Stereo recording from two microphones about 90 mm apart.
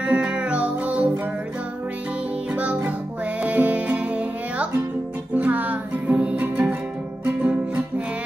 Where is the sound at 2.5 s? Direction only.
15° right (ahead or behind).